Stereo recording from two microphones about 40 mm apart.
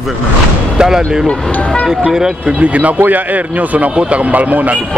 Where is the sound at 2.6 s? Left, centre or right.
Right.